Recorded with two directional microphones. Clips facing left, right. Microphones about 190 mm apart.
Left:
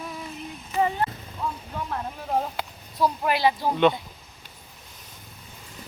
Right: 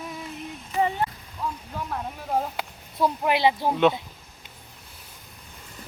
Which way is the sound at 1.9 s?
Centre (ahead or behind).